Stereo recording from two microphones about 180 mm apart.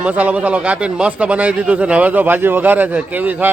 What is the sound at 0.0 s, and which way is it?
A man's voice, 10° right (ahead or behind).